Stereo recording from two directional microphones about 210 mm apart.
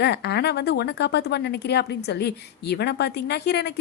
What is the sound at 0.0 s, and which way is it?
A woman's voice, 50° left (ahead or behind).